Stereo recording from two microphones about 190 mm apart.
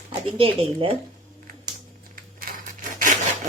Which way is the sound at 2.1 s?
50° right (ahead or behind).